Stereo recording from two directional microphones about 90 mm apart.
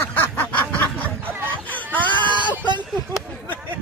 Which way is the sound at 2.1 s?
60° right (ahead or behind).